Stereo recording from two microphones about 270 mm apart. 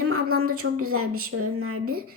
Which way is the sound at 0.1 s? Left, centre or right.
Right.